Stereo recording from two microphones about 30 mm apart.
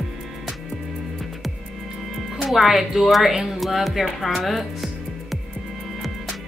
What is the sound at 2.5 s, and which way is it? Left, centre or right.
A woman's voice, centre.